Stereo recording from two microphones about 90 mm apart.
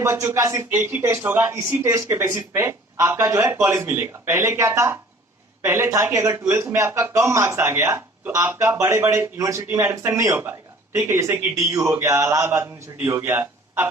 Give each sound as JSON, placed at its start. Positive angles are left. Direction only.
{"t": 0.0, "sound": "a man's voice", "side_deg": -30}
{"t": 0.8, "sound": "a man's voice", "side_deg": -25}